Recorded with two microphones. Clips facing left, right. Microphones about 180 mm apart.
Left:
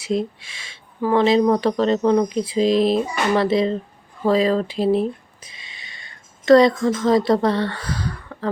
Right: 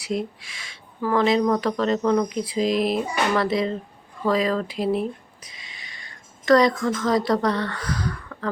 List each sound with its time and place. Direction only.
0.0 s speech: 25° left (ahead or behind)